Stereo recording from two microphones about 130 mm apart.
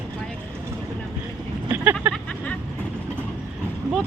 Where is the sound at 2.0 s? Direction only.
15° right (ahead or behind).